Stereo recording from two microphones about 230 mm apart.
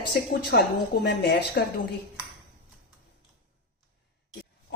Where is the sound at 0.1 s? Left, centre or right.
Left.